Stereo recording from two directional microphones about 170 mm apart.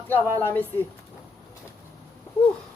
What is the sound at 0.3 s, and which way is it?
Speech, 10° left (ahead or behind).